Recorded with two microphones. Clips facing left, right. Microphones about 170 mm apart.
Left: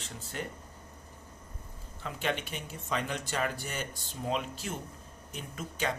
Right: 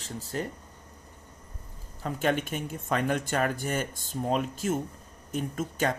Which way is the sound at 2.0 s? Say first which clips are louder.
Right 6 dB; 45° right (ahead or behind).